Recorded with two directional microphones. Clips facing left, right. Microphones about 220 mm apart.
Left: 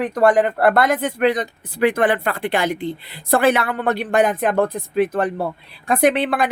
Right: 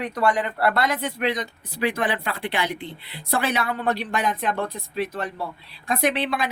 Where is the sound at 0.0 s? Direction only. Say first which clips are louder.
Left 8 dB; 50° left (ahead or behind).